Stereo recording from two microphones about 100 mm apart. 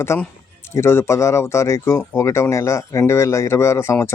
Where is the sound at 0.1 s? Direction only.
25° left (ahead or behind).